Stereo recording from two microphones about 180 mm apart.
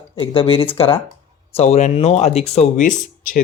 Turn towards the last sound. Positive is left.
turn(degrees=50)  # may be behind; listen again after turning